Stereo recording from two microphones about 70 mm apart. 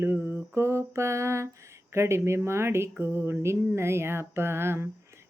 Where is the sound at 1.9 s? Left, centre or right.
Right.